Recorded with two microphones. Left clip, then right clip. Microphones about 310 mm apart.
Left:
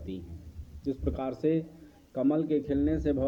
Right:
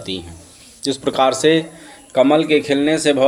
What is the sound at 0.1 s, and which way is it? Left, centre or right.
A man's voice, left.